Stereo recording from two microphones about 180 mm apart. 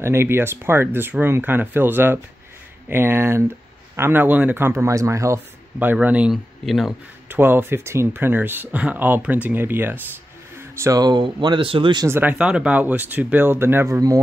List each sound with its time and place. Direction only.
0.0 s speech: 15° right (ahead or behind)
7.2 s speech: 10° right (ahead or behind)
12.1 s speech: 10° right (ahead or behind)